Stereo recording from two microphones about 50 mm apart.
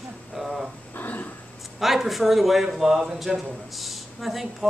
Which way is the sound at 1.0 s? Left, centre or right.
Left.